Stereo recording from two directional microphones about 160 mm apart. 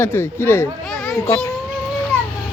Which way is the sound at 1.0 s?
Centre (ahead or behind).